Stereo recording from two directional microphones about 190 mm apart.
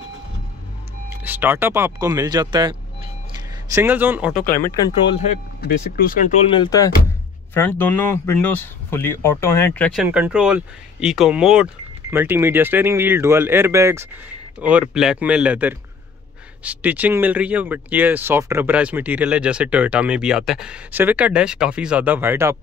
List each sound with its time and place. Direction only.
1.1 s speech: 10° right (ahead or behind)
3.7 s speech: 10° right (ahead or behind)
5.6 s speech: 50° left (ahead or behind)
6.4 s speech: 25° left (ahead or behind)
7.5 s speech: 10° left (ahead or behind)
10.0 s speech: 5° right (ahead or behind)